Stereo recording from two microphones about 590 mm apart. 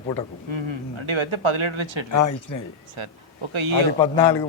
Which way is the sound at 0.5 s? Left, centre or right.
Right.